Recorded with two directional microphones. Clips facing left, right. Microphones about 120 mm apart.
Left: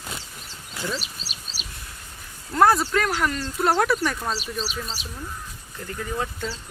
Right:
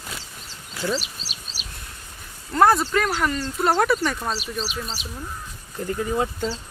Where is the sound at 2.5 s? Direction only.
Centre (ahead or behind).